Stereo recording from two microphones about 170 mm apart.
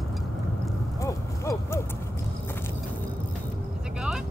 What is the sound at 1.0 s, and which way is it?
Hoot, 20° left (ahead or behind).